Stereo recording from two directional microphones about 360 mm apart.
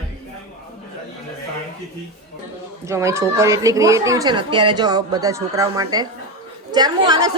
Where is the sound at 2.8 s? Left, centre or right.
Centre.